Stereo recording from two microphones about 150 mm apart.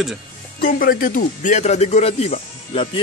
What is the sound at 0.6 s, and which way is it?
Speech, 70° left (ahead or behind).